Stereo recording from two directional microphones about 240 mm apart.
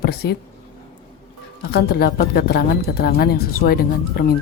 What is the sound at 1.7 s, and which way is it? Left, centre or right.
Speech, left.